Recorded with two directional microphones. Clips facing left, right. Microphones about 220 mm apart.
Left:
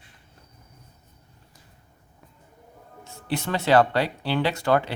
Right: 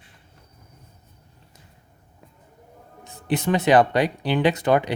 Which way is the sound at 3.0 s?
20° right (ahead or behind).